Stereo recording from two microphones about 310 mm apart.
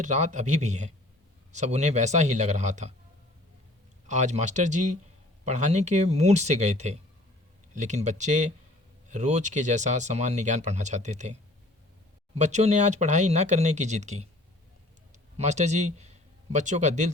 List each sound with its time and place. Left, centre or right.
0.0 s speech: right
4.1 s speech: right
12.4 s a man's voice: right